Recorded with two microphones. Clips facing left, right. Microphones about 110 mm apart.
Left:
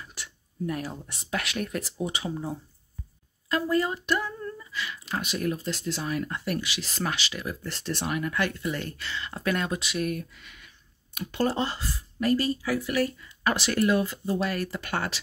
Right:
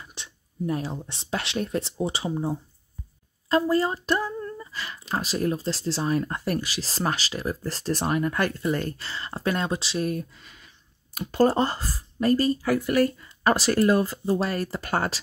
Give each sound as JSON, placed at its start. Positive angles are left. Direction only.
{"t": 0.0, "sound": "speech", "side_deg": -25}
{"t": 4.6, "sound": "speech", "side_deg": -40}